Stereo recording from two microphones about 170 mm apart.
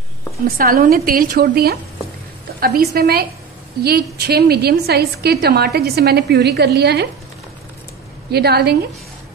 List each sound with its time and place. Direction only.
0.6 s a woman's voice: 60° right (ahead or behind)
8.3 s a woman's voice: 70° right (ahead or behind)